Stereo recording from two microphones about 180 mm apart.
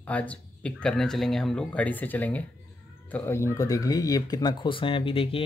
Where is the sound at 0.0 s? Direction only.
10° left (ahead or behind).